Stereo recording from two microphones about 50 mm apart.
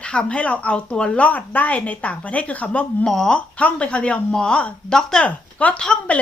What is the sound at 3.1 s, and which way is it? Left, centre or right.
Speech, centre.